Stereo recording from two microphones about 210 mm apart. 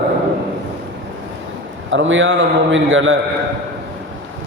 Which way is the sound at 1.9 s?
65° right (ahead or behind).